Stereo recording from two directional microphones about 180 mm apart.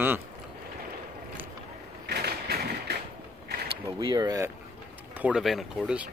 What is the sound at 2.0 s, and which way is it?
Mechanisms, 60° right (ahead or behind).